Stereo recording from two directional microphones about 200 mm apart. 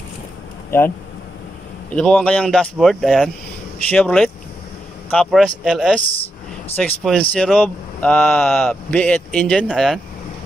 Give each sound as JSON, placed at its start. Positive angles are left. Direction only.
{"t": 0.7, "sound": "speech", "side_deg": 10}